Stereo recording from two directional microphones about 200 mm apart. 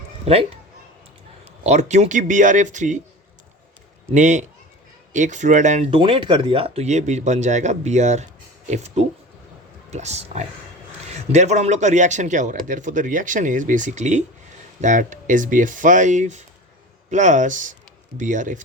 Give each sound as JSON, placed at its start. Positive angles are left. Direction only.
{"t": 0.3, "sound": "speech", "side_deg": -30}
{"t": 1.6, "sound": "speech", "side_deg": -35}
{"t": 4.1, "sound": "speech", "side_deg": -35}